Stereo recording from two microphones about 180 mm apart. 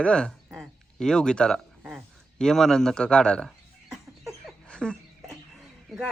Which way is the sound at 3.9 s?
Centre (ahead or behind).